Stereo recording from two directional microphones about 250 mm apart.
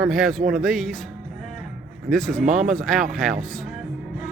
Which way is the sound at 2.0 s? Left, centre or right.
Centre.